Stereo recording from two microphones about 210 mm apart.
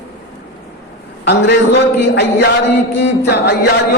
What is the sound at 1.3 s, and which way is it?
A man's voice, 55° left (ahead or behind).